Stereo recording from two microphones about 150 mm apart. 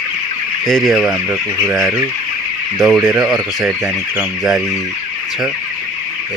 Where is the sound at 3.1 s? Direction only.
5° right (ahead or behind).